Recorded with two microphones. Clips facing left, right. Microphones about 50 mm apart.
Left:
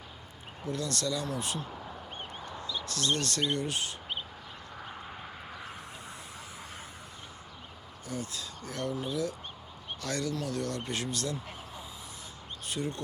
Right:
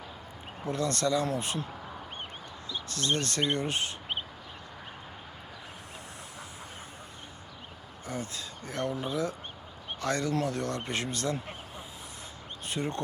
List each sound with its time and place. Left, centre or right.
0.6 s speech: right
2.6 s speech: right
8.0 s speech: right
12.6 s speech: right